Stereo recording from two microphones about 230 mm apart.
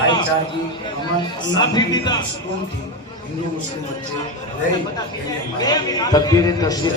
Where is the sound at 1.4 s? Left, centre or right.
Centre.